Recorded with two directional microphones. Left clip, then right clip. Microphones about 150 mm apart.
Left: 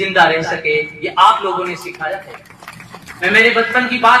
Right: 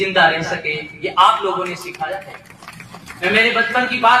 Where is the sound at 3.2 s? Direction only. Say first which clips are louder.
Left 4 dB; 20° right (ahead or behind).